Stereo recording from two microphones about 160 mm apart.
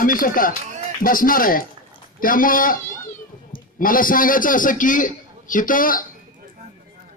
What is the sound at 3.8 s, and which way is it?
A man's voice, 60° left (ahead or behind).